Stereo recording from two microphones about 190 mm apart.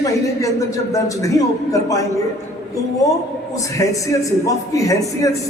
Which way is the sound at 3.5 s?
15° left (ahead or behind).